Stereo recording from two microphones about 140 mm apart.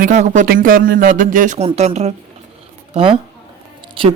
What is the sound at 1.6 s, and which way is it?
Speech, 50° right (ahead or behind).